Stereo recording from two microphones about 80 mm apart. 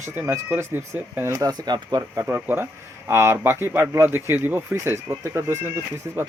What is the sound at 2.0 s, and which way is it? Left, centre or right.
Speech, right.